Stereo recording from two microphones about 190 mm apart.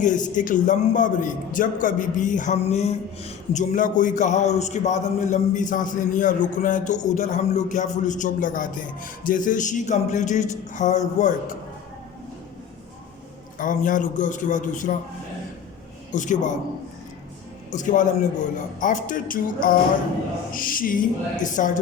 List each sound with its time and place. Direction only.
0.0 s a man's voice: 40° left (ahead or behind)
13.6 s a man's voice: 45° left (ahead or behind)
16.1 s a man's voice: 40° left (ahead or behind)
17.7 s a man's voice: 40° left (ahead or behind)